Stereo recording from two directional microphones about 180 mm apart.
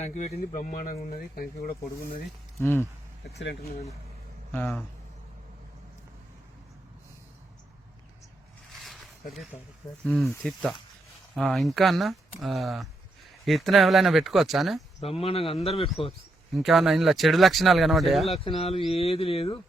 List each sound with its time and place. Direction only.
0.0 s speech: 40° left (ahead or behind)
2.6 s speech: 15° left (ahead or behind)
3.4 s speech: 65° left (ahead or behind)
4.5 s speech: 10° left (ahead or behind)
8.8 s zipper: centre (ahead or behind)
10.0 s speech: centre (ahead or behind)
15.0 s speech: 35° left (ahead or behind)
16.6 s speech: centre (ahead or behind)
18.3 s speech: 30° left (ahead or behind)